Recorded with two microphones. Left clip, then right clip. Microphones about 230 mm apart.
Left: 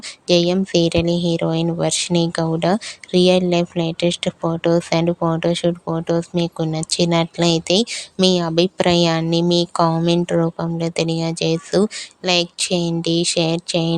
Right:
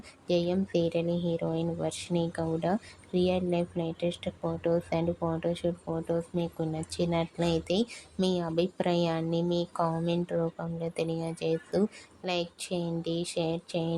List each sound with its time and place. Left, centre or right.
0.3 s speech: left